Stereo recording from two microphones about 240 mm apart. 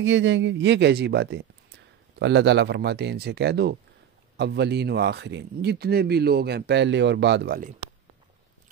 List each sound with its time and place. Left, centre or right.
0.0 s speech: right